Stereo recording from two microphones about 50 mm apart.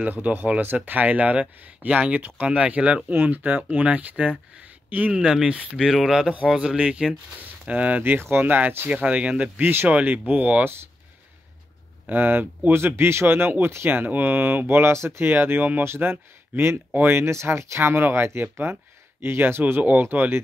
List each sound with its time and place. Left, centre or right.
0.0 s speech: right
5.1 s speech: centre
7.3 s speech: right
8.9 s speech: right
9.6 s speech: right
9.8 s speech: right
12.1 s speech: right
12.7 s speech: right
13.8 s speech: right
19.8 s speech: right